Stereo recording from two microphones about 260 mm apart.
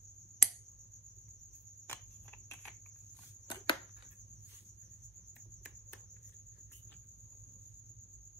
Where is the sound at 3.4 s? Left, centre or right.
Centre.